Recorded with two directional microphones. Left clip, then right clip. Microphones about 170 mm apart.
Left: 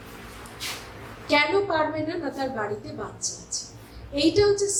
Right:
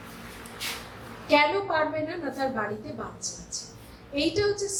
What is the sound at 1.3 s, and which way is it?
A woman's voice, 35° left (ahead or behind).